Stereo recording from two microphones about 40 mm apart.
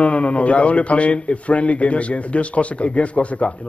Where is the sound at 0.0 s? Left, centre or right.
Left.